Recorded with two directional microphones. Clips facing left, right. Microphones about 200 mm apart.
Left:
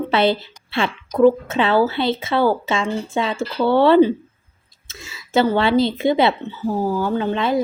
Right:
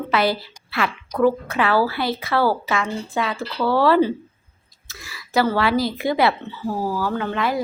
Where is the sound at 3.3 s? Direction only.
45° left (ahead or behind).